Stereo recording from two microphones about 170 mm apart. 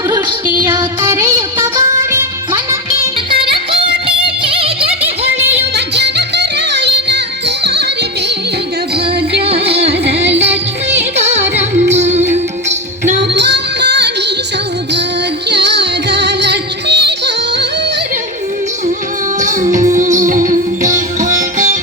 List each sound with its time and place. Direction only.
0.7 s music: 15° right (ahead or behind)
3.2 s music: 30° right (ahead or behind)
5.7 s music: 80° right
9.4 s music: 35° right (ahead or behind)
13.3 s music: 90° right
15.4 s music: 90° right
19.4 s music: 45° right (ahead or behind)
21.3 s sitar: 55° right (ahead or behind)